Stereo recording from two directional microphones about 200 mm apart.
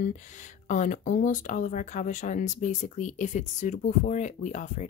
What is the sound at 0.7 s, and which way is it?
Speech, 40° left (ahead or behind).